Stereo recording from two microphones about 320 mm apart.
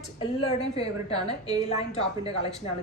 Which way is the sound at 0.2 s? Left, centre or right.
Centre.